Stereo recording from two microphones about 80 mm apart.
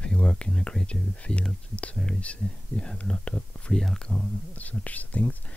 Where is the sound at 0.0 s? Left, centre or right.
Centre.